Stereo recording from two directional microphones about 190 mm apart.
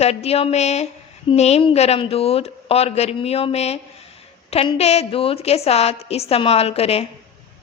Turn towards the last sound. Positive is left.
turn(degrees=30)  # may be behind; listen again after turning